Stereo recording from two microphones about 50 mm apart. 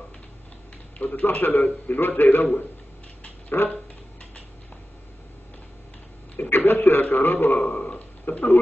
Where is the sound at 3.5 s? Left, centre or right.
Left.